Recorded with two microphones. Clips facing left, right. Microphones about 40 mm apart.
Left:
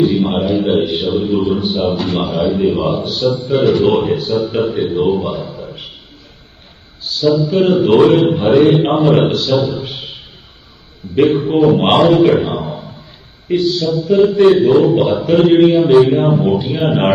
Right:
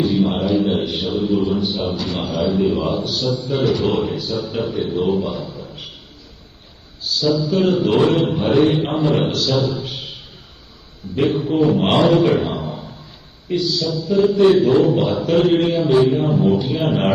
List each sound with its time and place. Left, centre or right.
0.0 s a sound: left
2.2 s a man's voice: left
7.0 s a man's voice: left
8.6 s a man's voice: left
9.3 s a man's voice: left
9.6 s a sound: left
11.1 s a man's voice: left
12.3 s a sound: left
13.5 s a man's voice: left
14.4 s a man's voice: left
16.0 s a man's voice: left
16.4 s a man's voice: left